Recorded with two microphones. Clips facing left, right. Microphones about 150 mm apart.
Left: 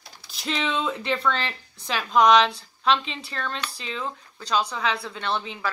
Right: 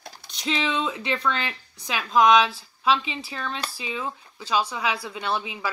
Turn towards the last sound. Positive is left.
turn(degrees=-10)  # may be behind; listen again after turning